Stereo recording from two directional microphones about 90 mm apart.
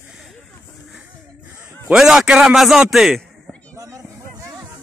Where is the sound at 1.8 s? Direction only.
5° right (ahead or behind).